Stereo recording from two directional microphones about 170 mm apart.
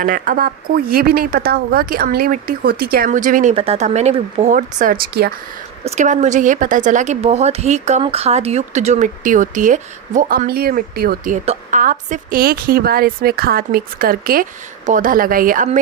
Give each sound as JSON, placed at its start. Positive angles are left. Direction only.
{"t": 0.0, "sound": "speech", "side_deg": -55}
{"t": 3.5, "sound": "speech", "side_deg": -35}
{"t": 5.8, "sound": "speech", "side_deg": -40}